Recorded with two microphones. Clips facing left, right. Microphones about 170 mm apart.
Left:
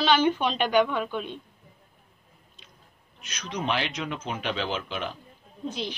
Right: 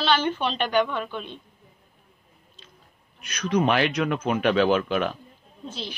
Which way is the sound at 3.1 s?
55° right (ahead or behind).